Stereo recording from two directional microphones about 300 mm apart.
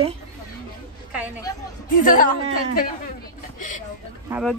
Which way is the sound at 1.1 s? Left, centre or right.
Centre.